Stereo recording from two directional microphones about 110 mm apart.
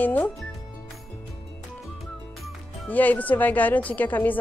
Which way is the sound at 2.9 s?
15° left (ahead or behind).